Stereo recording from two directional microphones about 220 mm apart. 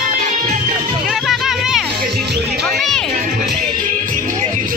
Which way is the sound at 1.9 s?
45° right (ahead or behind).